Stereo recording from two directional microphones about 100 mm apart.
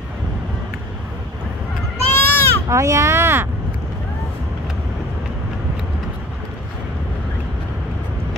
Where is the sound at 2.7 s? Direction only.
30° right (ahead or behind).